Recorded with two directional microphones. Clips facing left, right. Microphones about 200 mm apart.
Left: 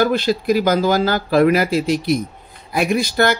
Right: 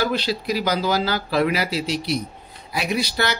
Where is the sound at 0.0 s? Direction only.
50° left (ahead or behind).